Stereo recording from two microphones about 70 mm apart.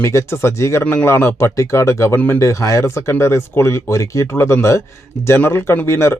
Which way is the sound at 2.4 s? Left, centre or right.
Left.